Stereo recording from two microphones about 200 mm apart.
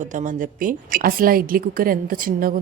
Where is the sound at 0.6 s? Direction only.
45° right (ahead or behind).